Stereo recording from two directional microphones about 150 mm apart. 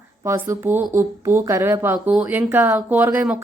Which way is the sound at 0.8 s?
60° right (ahead or behind).